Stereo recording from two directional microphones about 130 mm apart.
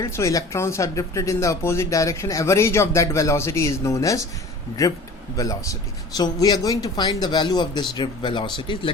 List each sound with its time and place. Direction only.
0.0 s speech: 25° left (ahead or behind); by 8.9 s 40° left (ahead or behind)